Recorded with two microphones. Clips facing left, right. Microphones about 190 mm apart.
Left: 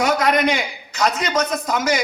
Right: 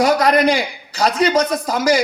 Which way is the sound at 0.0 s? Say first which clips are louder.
Right 4 dB; 35° right (ahead or behind).